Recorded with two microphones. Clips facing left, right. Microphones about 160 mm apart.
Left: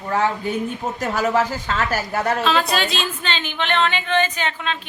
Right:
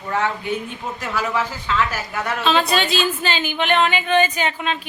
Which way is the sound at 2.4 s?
Centre (ahead or behind).